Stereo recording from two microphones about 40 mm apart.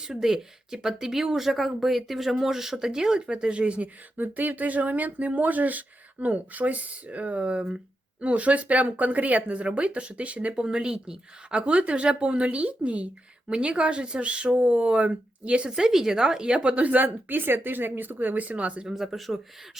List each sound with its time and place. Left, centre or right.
0.0 s speech: centre; by 3.8 s right
4.2 s speech: right
10.5 s speech: right
15.7 s speech: centre; by 18.9 s right
19.0 s speech: centre